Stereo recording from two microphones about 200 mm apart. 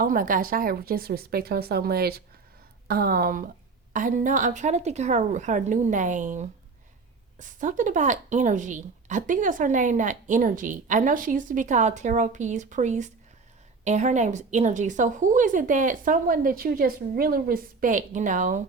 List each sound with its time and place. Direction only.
0.0 s speech: 45° right (ahead or behind)